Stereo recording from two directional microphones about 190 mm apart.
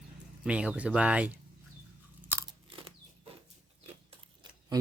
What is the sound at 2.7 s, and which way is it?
Crunch, 25° right (ahead or behind).